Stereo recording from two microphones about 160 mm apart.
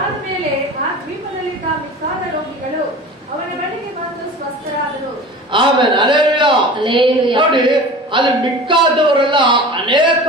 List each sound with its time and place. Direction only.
5.5 s a man's voice: 30° right (ahead or behind)